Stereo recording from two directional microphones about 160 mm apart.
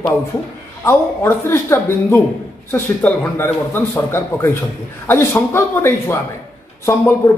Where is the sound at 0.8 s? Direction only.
15° left (ahead or behind).